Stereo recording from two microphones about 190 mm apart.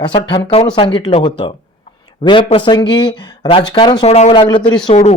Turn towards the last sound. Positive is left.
turn(degrees=25)  # may be behind; listen again after turning